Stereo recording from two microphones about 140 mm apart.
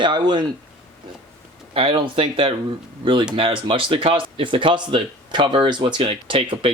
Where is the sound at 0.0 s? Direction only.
35° right (ahead or behind).